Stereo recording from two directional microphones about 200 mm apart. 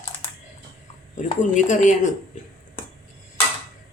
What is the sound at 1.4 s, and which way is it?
Speech, 40° left (ahead or behind).